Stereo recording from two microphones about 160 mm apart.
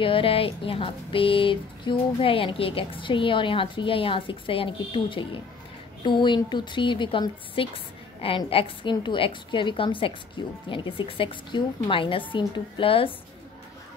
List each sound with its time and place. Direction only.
0.0 s a woman's voice: 35° left (ahead or behind)